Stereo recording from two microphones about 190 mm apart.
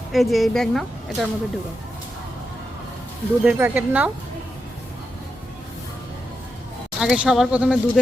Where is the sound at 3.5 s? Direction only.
10° right (ahead or behind).